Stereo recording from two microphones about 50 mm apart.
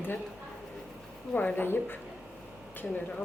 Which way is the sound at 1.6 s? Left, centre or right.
Left.